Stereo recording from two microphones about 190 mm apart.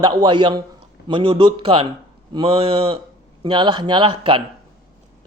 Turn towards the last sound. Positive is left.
turn(degrees=-30)  # may be behind; listen again after turning